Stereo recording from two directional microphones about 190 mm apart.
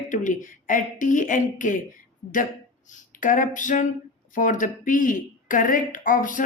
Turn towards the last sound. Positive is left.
turn(degrees=45)  # may be behind; listen again after turning